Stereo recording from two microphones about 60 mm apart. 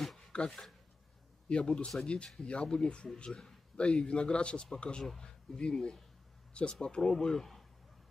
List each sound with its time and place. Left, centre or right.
0.3 s a man's voice: centre
5.0 s speech: centre
5.6 s a man's voice: centre